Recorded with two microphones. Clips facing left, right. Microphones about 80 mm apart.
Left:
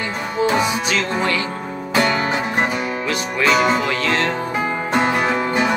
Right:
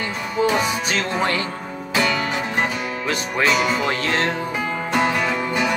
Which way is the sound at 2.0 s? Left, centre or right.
Left.